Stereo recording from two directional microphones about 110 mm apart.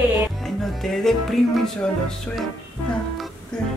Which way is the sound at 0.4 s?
Centre (ahead or behind).